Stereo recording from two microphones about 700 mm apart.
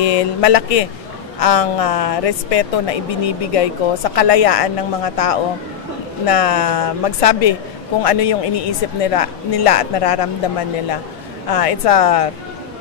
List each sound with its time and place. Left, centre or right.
0.0 s a woman's voice: left
11.5 s a woman's voice: left